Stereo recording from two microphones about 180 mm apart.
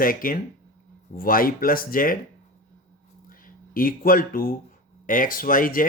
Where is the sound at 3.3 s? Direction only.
50° left (ahead or behind).